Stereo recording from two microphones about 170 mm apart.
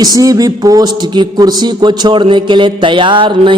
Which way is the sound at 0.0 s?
20° right (ahead or behind).